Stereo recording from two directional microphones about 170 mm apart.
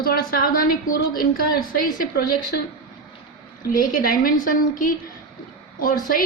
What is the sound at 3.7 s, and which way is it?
A woman's voice, 55° left (ahead or behind).